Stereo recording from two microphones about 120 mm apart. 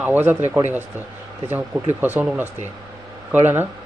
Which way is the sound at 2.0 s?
15° right (ahead or behind).